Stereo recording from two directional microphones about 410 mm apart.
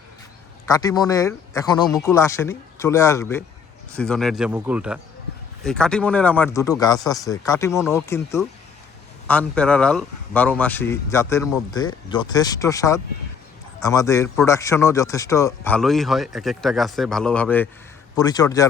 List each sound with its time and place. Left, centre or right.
0.7 s speech: centre